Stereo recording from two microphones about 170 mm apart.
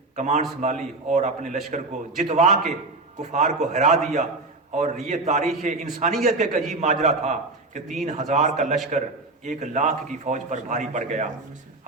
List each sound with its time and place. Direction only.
0.2 s a man's voice: 45° right (ahead or behind)